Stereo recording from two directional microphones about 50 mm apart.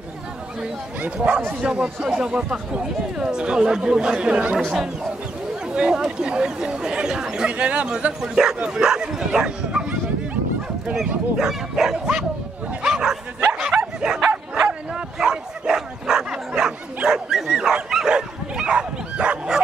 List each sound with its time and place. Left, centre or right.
1.0 s speech: right
2.0 s speech: centre
4.6 s speech: centre
11.3 s speech: centre
12.8 s bow-wow: centre
13.7 s bow-wow: right
14.5 s bow-wow: centre
17.5 s dog: centre